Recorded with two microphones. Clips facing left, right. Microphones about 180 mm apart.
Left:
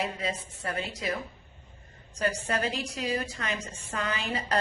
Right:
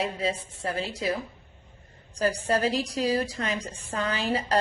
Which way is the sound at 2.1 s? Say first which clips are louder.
Right 4 dB; 35° right (ahead or behind).